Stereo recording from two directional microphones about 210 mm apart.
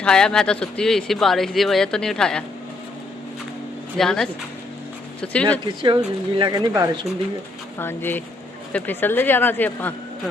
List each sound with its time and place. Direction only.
0.0 s speech: 5° left (ahead or behind)
3.9 s speech: centre (ahead or behind)
5.8 s speech: 25° right (ahead or behind)
7.8 s speech: 10° left (ahead or behind)